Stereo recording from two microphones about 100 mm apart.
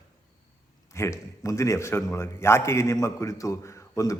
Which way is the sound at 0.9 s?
30° left (ahead or behind).